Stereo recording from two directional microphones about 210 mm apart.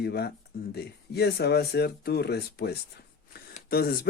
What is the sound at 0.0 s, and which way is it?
Speech, 50° left (ahead or behind).